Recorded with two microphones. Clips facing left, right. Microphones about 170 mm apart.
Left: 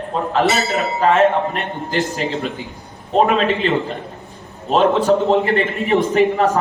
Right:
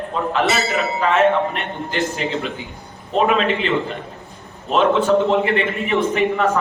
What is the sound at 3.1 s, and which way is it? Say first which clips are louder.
A man's voice: left 2 dB; 40° left (ahead or behind).